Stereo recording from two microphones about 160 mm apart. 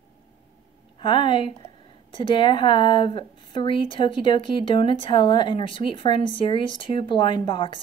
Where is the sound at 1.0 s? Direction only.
30° left (ahead or behind).